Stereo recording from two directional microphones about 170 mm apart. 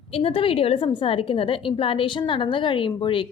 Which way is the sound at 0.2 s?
35° left (ahead or behind).